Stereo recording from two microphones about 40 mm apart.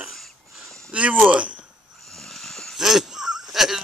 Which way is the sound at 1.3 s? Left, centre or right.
Right.